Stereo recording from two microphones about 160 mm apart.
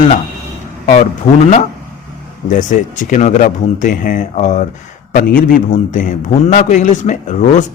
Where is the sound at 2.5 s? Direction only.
50° left (ahead or behind).